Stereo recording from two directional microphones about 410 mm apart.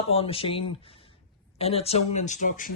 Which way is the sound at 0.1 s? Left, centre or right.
Centre.